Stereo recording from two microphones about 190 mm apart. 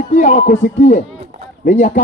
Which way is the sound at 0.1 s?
40° left (ahead or behind).